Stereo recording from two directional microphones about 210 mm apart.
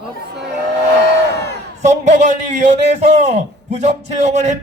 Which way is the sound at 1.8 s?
35° right (ahead or behind).